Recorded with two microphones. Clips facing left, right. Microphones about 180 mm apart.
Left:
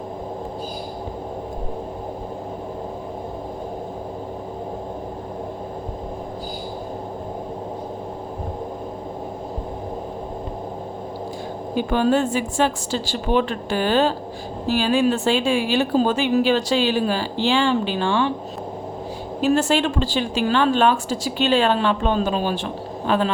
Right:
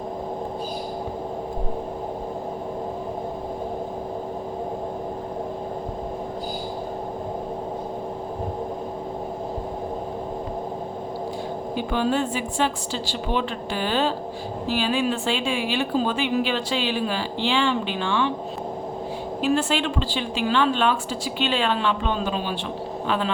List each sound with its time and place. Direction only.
11.9 s a woman's voice: 45° left (ahead or behind)
19.4 s a woman's voice: 45° left (ahead or behind)